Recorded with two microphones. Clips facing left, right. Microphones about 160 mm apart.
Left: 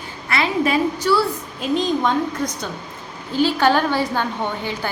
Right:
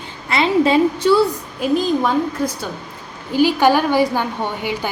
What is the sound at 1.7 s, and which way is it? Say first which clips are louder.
A woman's voice: right 2 dB; 5° right (ahead or behind).